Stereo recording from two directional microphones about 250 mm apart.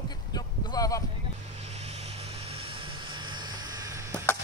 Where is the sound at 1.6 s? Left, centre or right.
Right.